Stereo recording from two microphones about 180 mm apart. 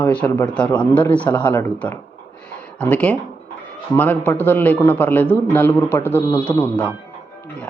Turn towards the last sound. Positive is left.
turn(degrees=10)  # may be behind; listen again after turning